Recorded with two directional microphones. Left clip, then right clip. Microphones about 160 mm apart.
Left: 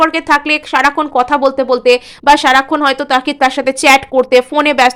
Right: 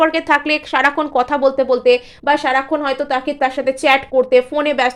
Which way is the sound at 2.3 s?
40° left (ahead or behind).